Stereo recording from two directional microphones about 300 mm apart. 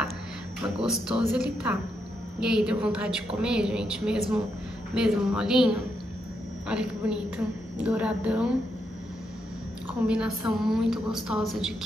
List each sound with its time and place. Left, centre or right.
0.8 s a woman's voice: centre
10.0 s a woman's voice: centre